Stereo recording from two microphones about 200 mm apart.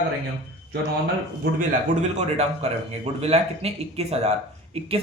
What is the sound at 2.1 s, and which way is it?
Speech, 35° right (ahead or behind).